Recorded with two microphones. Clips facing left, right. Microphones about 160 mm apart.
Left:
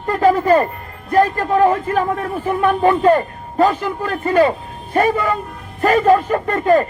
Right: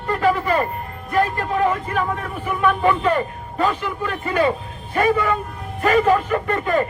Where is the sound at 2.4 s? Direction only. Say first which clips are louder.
Left 3 dB; 40° left (ahead or behind).